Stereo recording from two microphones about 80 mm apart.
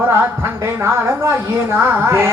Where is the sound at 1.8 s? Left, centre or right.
Right.